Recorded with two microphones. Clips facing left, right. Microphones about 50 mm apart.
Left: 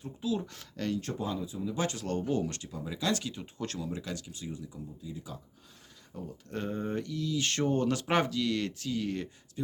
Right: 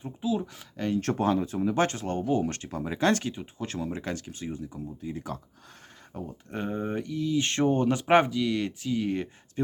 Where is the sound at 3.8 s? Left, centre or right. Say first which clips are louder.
Right 5 dB; right.